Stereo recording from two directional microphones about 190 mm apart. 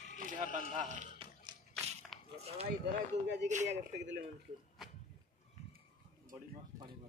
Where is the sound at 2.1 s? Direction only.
Centre (ahead or behind).